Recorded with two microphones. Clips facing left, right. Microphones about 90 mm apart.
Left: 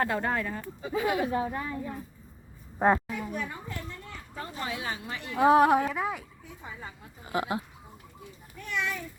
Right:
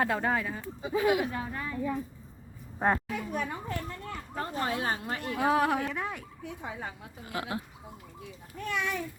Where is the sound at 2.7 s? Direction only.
15° left (ahead or behind).